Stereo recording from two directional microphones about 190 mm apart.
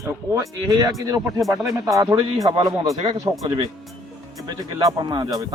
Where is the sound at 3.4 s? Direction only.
30° right (ahead or behind).